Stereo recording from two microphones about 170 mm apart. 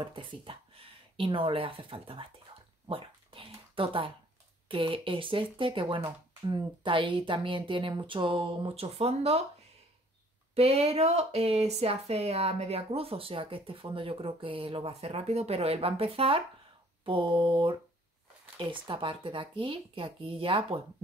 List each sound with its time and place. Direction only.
0.0 s speech: 30° right (ahead or behind)
2.9 s a sound: 30° right (ahead or behind)
4.6 s speech: 30° right (ahead or behind)
10.5 s speech: 35° right (ahead or behind)